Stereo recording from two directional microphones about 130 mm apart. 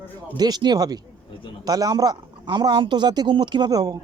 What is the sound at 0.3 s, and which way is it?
A man's voice, 30° right (ahead or behind).